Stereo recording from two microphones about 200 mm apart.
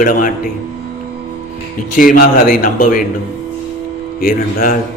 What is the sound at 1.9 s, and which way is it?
Speech, 45° left (ahead or behind).